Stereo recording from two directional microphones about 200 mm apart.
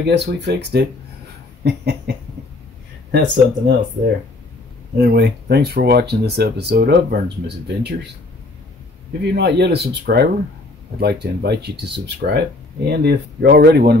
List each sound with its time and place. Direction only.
0.0 s speech: 55° right (ahead or behind)
5.0 s speech: 55° right (ahead or behind)
9.3 s speech: 55° right (ahead or behind)